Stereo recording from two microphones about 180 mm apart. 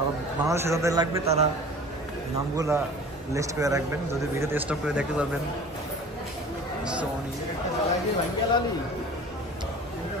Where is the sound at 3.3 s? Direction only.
20° right (ahead or behind).